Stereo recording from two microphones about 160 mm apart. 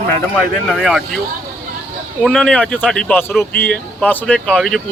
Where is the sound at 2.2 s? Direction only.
5° left (ahead or behind).